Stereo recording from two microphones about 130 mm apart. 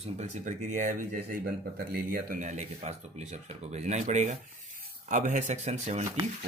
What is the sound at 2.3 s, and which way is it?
Speech, 65° right (ahead or behind).